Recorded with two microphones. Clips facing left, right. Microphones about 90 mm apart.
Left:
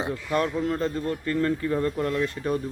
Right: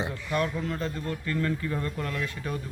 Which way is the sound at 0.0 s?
35° left (ahead or behind).